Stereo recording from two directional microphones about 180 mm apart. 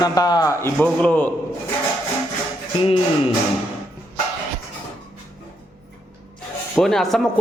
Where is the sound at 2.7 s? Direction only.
35° left (ahead or behind).